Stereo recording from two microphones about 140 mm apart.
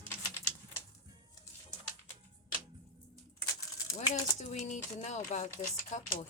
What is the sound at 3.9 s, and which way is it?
Speech, 55° left (ahead or behind).